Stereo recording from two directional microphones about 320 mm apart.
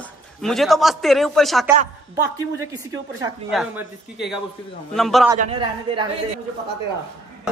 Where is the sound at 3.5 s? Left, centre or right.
Centre.